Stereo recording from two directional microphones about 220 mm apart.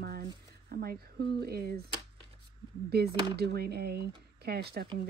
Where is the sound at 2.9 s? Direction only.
45° right (ahead or behind).